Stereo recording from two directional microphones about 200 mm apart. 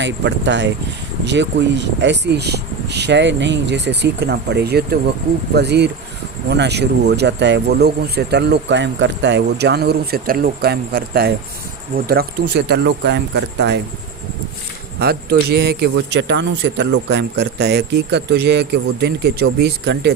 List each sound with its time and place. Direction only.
0.0 s speech: 60° right (ahead or behind)
14.9 s speech: 50° right (ahead or behind)